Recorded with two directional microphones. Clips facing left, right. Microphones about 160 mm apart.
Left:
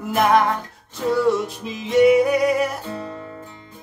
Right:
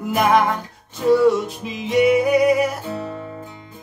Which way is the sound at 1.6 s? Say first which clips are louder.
Left 2 dB; centre (ahead or behind).